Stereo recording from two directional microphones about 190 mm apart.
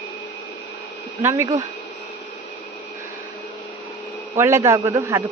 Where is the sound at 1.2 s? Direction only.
15° right (ahead or behind).